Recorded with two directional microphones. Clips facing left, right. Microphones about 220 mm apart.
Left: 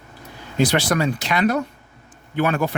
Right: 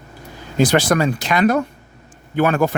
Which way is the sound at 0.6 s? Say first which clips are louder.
Right 4 dB; 50° right (ahead or behind).